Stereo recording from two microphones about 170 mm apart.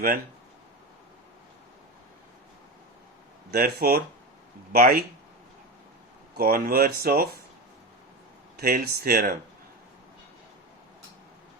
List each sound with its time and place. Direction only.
3.5 s speech: 60° right (ahead or behind)
6.3 s speech: 60° right (ahead or behind)
8.5 s speech: 65° right (ahead or behind)